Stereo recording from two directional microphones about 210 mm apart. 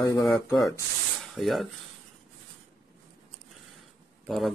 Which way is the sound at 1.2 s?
Centre (ahead or behind).